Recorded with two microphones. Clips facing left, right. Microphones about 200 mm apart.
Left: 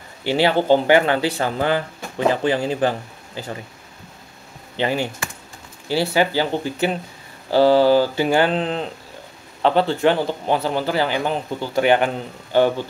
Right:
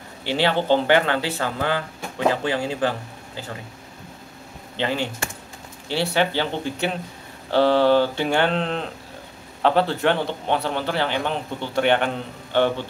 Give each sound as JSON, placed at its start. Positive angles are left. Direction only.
{"t": 0.2, "sound": "speech", "side_deg": 10}
{"t": 4.7, "sound": "a man's voice", "side_deg": 10}